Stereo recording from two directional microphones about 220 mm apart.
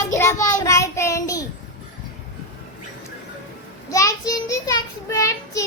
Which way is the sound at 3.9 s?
15° left (ahead or behind).